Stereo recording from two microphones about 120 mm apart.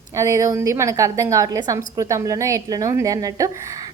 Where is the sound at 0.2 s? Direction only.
25° right (ahead or behind).